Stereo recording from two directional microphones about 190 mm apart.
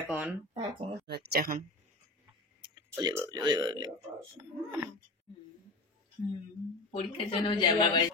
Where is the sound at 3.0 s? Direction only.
15° right (ahead or behind).